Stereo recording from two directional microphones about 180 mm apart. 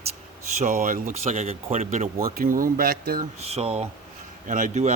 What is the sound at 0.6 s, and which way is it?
Speech, 50° right (ahead or behind).